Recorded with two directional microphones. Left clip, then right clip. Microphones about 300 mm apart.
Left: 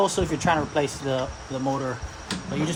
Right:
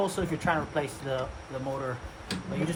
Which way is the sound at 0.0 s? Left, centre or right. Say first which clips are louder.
Left 6 dB; left.